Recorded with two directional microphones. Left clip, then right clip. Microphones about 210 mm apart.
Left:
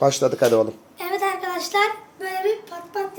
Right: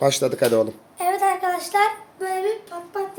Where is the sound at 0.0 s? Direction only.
5° right (ahead or behind).